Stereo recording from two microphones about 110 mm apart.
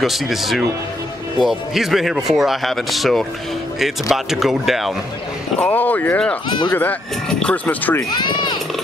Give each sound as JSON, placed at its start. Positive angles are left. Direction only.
{"t": 0.0, "sound": "speech", "side_deg": 0}
{"t": 5.7, "sound": "speech", "side_deg": 15}
{"t": 8.1, "sound": "speech", "side_deg": 40}